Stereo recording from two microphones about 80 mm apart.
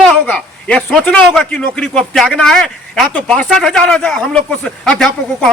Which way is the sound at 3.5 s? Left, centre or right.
Centre.